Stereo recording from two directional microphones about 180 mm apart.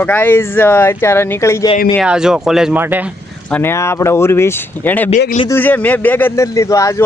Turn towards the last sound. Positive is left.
turn(degrees=15)  # may be behind; listen again after turning